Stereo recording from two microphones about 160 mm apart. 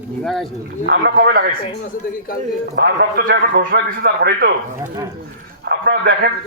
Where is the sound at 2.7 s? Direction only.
85° right.